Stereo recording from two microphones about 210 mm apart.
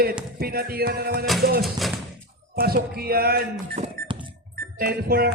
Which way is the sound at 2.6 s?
45° right (ahead or behind).